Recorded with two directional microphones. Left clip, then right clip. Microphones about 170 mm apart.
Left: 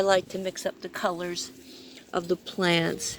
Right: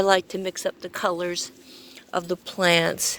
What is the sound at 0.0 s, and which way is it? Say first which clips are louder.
A woman's voice: right 3 dB; 55° right (ahead or behind).